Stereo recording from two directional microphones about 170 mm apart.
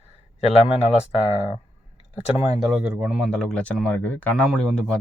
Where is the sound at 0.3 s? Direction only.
40° left (ahead or behind).